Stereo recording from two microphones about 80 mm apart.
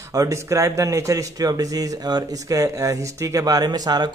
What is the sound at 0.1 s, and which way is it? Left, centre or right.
Speech, right.